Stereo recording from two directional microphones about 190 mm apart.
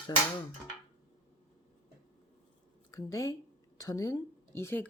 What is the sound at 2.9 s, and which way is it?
Speech, 15° left (ahead or behind).